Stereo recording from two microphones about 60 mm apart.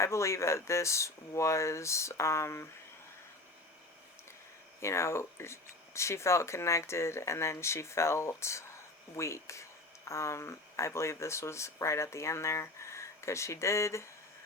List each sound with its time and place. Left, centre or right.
0.0 s speech: left
4.8 s speech: left